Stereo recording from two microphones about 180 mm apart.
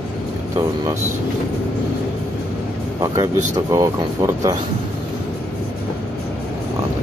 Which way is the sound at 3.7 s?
20° right (ahead or behind).